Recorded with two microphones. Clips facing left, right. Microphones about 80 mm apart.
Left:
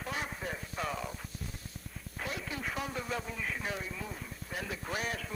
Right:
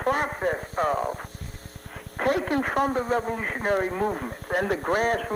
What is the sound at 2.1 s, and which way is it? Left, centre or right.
Speech, right.